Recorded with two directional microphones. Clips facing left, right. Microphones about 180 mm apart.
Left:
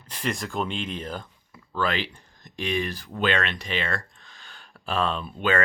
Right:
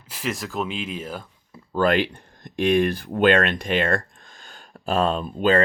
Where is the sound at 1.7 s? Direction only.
50° right (ahead or behind).